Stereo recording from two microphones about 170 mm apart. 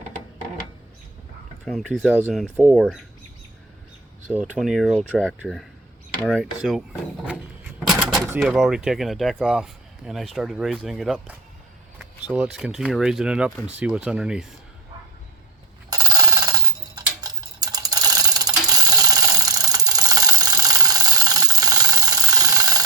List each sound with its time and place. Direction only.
1.6 s speech: centre (ahead or behind)
4.3 s speech: 5° right (ahead or behind)
7.8 s a sound: centre (ahead or behind)
8.4 s speech: 5° right (ahead or behind)
15.9 s clock: 20° right (ahead or behind)